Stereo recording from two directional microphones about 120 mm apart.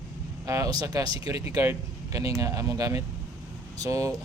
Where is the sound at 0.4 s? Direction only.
25° right (ahead or behind).